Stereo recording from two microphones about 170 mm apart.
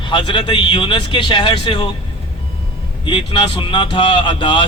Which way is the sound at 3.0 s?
30° left (ahead or behind).